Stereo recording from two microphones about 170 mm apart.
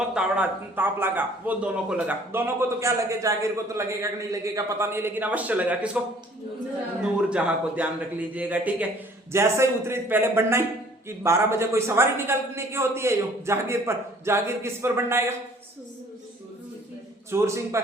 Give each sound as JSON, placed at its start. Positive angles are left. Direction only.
{"t": 0.1, "sound": "a man's voice", "side_deg": -5}
{"t": 7.0, "sound": "a man's voice", "side_deg": -5}
{"t": 17.3, "sound": "a man's voice", "side_deg": -15}